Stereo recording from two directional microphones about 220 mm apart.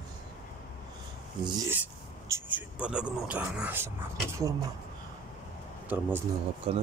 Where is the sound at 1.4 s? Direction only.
20° right (ahead or behind).